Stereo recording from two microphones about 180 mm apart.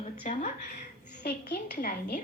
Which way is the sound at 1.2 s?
50° left (ahead or behind).